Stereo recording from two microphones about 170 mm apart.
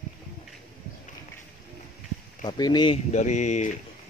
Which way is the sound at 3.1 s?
45° left (ahead or behind).